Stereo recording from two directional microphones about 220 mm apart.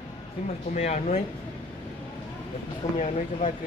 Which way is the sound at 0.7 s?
30° left (ahead or behind).